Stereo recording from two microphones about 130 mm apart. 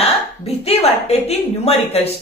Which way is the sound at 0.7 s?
50° left (ahead or behind).